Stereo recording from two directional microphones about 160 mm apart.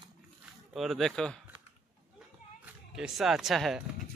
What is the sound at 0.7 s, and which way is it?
Speech, centre (ahead or behind).